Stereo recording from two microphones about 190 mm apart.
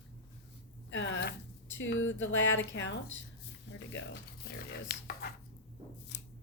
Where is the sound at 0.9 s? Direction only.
75° left (ahead or behind).